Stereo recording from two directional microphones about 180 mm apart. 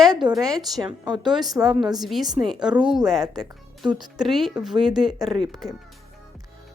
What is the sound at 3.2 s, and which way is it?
Speech, 20° right (ahead or behind).